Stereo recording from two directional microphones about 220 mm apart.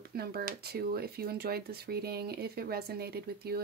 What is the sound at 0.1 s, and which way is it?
Speech, 45° right (ahead or behind).